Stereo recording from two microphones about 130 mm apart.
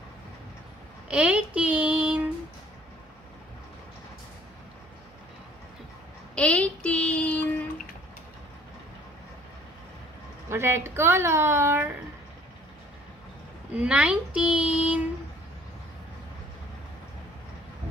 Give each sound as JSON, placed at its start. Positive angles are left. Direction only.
{"t": 1.1, "sound": "child singing", "side_deg": -10}
{"t": 6.3, "sound": "child singing", "side_deg": 10}
{"t": 10.5, "sound": "a woman's voice", "side_deg": -20}
{"t": 13.7, "sound": "a child's voice", "side_deg": -10}